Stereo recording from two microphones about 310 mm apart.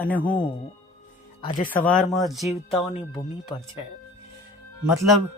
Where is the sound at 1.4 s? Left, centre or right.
Left.